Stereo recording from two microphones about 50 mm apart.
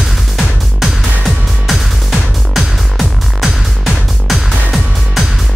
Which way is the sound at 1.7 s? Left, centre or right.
Centre.